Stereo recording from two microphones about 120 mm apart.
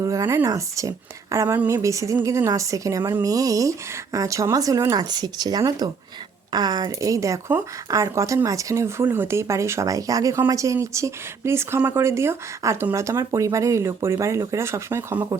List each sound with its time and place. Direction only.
0.0 s speech: 25° right (ahead or behind)